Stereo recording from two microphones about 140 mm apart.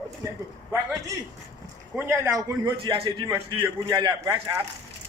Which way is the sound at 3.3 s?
25° right (ahead or behind).